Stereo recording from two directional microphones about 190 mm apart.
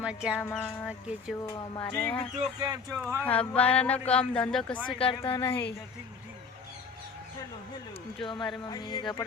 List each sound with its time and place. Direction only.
0.0 s speech: 5° right (ahead or behind)
0.5 s music: 10° left (ahead or behind)
1.4 s a woman's voice: 20° left (ahead or behind)
1.8 s music: 10° left (ahead or behind)
2.6 s speech: 20° right (ahead or behind)
3.2 s music: 10° left (ahead or behind)
4.1 s speech: 5° left (ahead or behind)
4.9 s a woman's voice: 30° left (ahead or behind)
8.2 s a woman's voice: 25° left (ahead or behind)